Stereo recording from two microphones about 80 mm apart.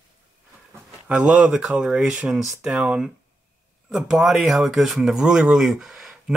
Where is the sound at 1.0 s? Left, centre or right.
Centre.